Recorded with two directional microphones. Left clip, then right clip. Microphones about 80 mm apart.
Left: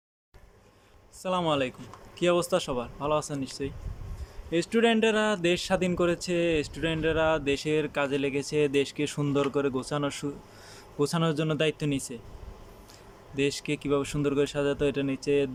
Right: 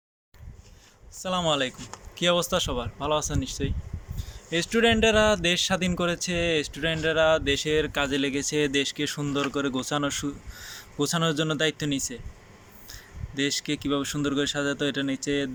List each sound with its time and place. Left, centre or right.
1.2 s speech: left
9.6 s speech: centre